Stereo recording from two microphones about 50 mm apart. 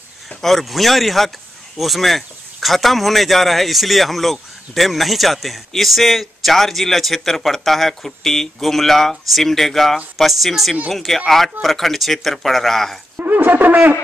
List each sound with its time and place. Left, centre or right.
0.4 s speech: centre
13.2 s brass instrument: right